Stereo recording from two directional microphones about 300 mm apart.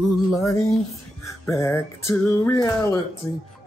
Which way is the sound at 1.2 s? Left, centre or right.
Centre.